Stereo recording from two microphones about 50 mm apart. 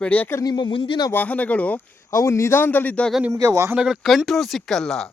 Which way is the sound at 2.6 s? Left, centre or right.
Left.